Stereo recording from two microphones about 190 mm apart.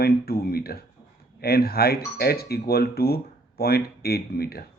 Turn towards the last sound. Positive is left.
turn(degrees=55)  # may be behind; listen again after turning